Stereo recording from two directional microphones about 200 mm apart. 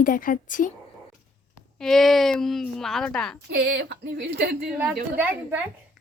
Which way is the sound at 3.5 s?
55° right (ahead or behind).